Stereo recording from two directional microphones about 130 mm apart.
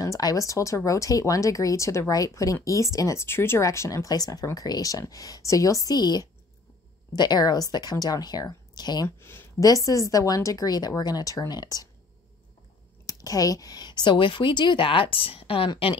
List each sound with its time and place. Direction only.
0.0 s a woman's voice: 25° left (ahead or behind)
9.2 s speech: 20° left (ahead or behind)
13.0 s a woman's voice: 25° left (ahead or behind); by 16.0 s 40° left (ahead or behind)